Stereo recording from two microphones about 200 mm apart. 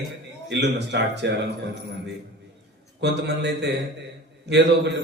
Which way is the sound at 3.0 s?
60° right (ahead or behind).